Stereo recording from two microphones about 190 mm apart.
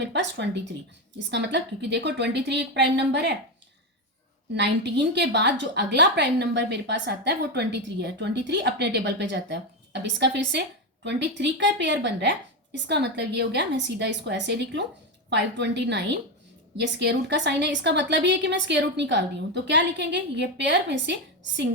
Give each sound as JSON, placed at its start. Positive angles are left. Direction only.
{"t": 0.0, "sound": "a woman's voice", "side_deg": -65}
{"t": 4.5, "sound": "a woman's voice", "side_deg": -65}